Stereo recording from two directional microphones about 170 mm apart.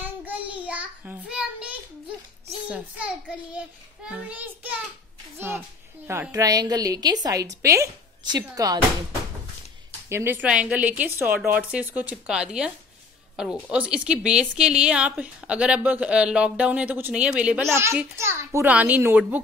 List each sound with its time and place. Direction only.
0.0 s child singing: 10° right (ahead or behind)
2.7 s a woman's voice: 10° right (ahead or behind)
6.0 s a woman's voice: 15° right (ahead or behind)
10.0 s a woman's voice: 15° right (ahead or behind)